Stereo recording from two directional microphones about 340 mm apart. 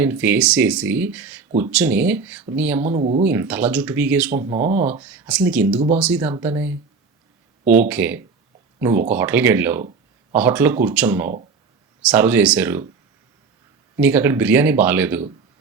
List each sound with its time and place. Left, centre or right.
0.0 s speech: centre
3.0 s speech: centre
3.2 s speech: centre
13.9 s speech: centre